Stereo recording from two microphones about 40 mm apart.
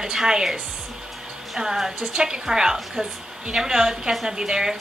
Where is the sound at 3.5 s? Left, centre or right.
Centre.